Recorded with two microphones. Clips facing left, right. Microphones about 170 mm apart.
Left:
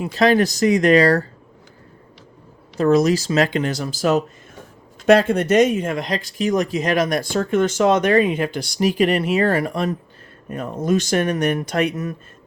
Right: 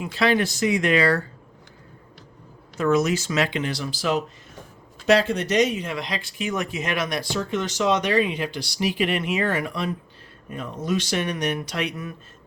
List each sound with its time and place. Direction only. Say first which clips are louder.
0.0 s speech: left 5 dB; 40° left (ahead or behind)
2.7 s speech: left 5 dB; 35° left (ahead or behind)